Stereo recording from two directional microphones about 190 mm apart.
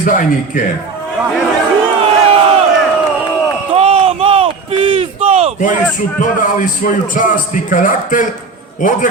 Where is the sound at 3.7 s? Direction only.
30° right (ahead or behind).